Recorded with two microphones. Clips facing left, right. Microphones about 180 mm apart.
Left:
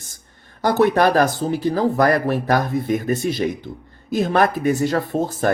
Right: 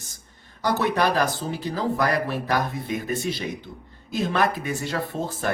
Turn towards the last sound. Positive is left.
turn(degrees=45)  # may be behind; listen again after turning